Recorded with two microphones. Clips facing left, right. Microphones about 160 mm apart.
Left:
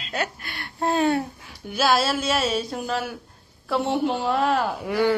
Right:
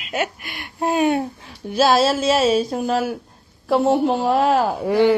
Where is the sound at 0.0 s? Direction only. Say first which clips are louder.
Right 4 dB; 15° right (ahead or behind).